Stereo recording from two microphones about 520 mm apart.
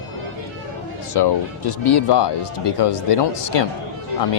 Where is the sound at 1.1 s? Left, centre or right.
Left.